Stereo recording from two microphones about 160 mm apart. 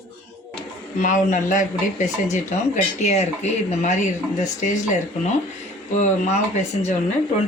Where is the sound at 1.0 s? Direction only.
50° left (ahead or behind).